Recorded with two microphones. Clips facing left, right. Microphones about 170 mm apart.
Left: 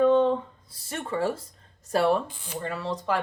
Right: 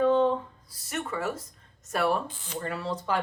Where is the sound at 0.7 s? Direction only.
30° left (ahead or behind).